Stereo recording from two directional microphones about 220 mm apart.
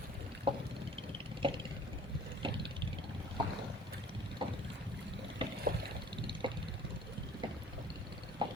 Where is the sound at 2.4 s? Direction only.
20° right (ahead or behind).